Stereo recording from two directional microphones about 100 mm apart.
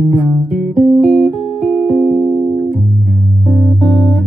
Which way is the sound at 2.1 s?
20° left (ahead or behind).